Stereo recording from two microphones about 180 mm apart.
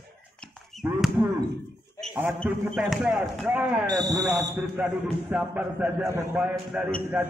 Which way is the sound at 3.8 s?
20° right (ahead or behind).